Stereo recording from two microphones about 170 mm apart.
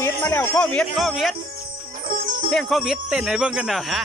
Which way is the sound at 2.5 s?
Centre (ahead or behind).